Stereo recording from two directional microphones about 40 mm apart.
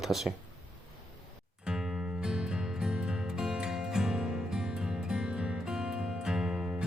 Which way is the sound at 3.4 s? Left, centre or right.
Centre.